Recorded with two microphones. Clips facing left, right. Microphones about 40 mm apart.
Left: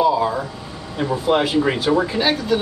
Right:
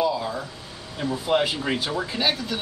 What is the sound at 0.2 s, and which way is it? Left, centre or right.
Air conditioning, left.